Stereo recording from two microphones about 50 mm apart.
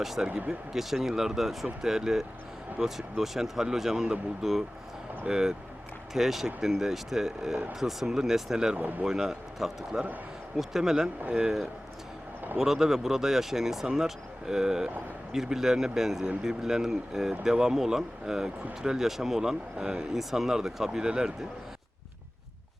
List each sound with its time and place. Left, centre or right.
0.0 s speech: centre
0.3 s speech: centre
0.8 s speech: centre